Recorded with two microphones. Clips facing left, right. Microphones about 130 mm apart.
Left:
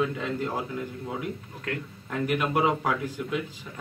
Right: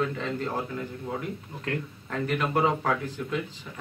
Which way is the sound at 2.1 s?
5° left (ahead or behind).